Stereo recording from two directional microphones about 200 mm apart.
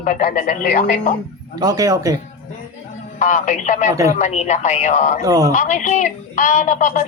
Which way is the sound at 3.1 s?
35° left (ahead or behind).